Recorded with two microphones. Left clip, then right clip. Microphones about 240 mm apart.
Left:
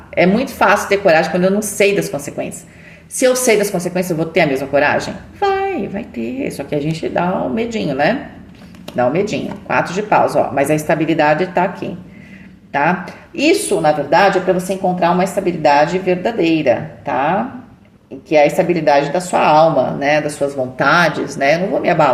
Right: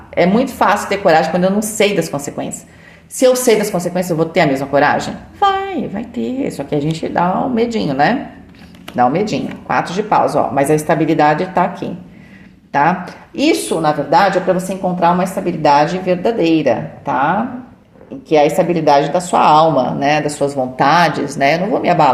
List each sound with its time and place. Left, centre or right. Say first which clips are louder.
0.1 s a woman's voice: right 1 dB; right